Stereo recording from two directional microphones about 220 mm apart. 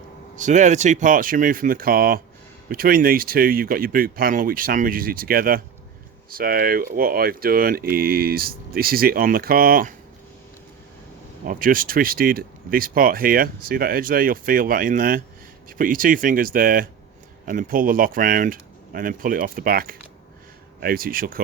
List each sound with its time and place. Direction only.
0.3 s speech: 35° right (ahead or behind)
11.4 s speech: 40° right (ahead or behind)